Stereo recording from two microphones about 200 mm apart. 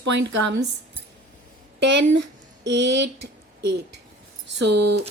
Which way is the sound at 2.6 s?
60° right (ahead or behind).